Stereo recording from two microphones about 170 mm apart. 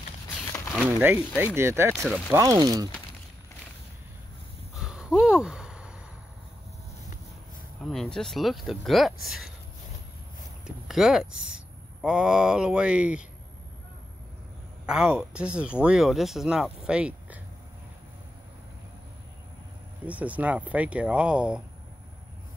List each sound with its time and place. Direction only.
0.8 s speech: 10° right (ahead or behind)
2.0 s speech: centre (ahead or behind)
2.3 s speech: 20° right (ahead or behind)
4.8 s a sound: 5° right (ahead or behind)
7.8 s speech: centre (ahead or behind)
10.9 s speech: centre (ahead or behind)
14.9 s speech: 5° right (ahead or behind)
20.1 s speech: 10° right (ahead or behind)